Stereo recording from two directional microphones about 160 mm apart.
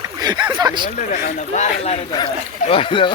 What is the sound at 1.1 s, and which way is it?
Speech, 50° left (ahead or behind).